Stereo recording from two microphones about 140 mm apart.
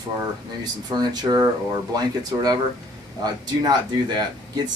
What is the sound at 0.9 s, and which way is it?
Speech, 30° right (ahead or behind).